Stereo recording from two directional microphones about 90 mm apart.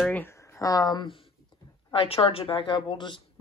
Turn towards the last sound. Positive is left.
turn(degrees=65)  # may be behind; listen again after turning